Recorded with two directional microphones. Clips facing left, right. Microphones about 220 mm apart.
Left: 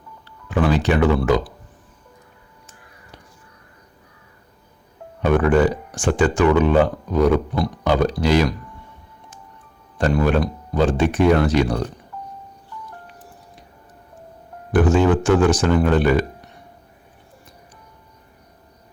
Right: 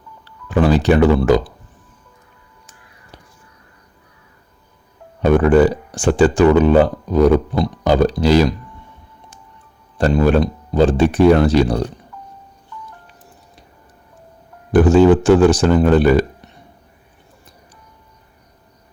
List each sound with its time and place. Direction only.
0.5 s speech: 35° right (ahead or behind)
5.2 s speech: 30° right (ahead or behind)
10.0 s speech: 35° right (ahead or behind)
14.7 s speech: 35° right (ahead or behind)